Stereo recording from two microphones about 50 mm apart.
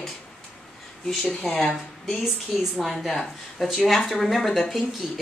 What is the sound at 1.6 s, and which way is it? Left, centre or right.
A woman's voice, centre.